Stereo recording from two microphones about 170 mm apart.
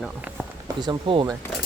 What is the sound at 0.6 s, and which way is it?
Speech, 25° right (ahead or behind).